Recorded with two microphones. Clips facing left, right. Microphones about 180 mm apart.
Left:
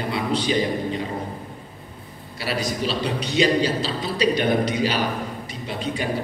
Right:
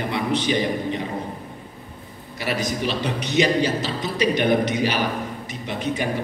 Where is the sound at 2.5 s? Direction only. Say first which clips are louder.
Left 1 dB; 20° right (ahead or behind).